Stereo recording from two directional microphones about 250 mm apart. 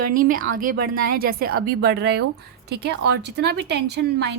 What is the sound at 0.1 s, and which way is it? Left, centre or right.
A woman's voice, right.